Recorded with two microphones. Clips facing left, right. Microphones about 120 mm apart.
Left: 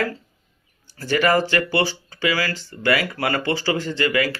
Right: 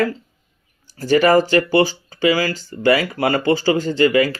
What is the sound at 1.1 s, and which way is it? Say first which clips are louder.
Speech: right 5 dB; 30° right (ahead or behind).